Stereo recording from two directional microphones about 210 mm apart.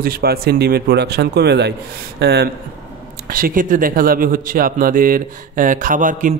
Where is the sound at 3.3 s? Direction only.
40° right (ahead or behind).